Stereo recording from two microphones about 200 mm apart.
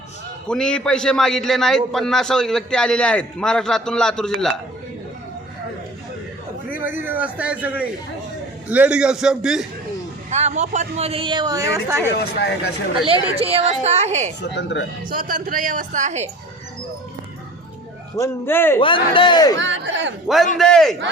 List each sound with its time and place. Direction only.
0.4 s a man's voice: 5° left (ahead or behind)
6.7 s a sound: 10° right (ahead or behind)
7.0 s a man's voice: 10° right (ahead or behind)
10.2 s speech: 35° right (ahead or behind); by 12.1 s 10° right (ahead or behind)
12.1 s speech: 55° left (ahead or behind)
13.3 s a woman's voice: 30° right (ahead or behind)
14.4 s speech: 60° left (ahead or behind)
15.1 s a woman's voice: 45° right (ahead or behind)
18.2 s a man's voice: 10° left (ahead or behind)
18.8 s speech: 25° left (ahead or behind)
19.5 s speech: 65° right (ahead or behind)
20.2 s a man's voice: centre (ahead or behind)